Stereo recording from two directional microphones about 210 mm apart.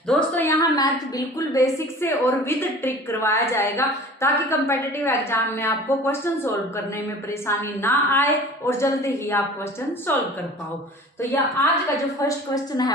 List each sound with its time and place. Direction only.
0.1 s a woman's voice: 10° left (ahead or behind)